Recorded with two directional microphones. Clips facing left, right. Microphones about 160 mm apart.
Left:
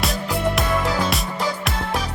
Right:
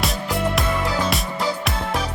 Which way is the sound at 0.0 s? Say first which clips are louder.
Left 1 dB; centre (ahead or behind).